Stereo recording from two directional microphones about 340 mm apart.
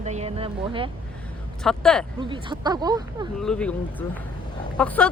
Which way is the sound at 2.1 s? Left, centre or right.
Centre.